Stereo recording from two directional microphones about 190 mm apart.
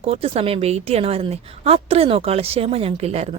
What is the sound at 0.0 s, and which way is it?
A woman's voice, 30° right (ahead or behind).